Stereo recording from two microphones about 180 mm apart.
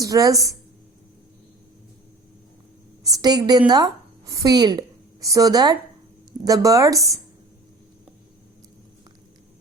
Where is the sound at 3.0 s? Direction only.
20° right (ahead or behind).